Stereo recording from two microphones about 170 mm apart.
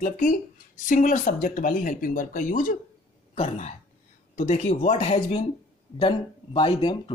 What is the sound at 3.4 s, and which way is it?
Speech, 40° left (ahead or behind).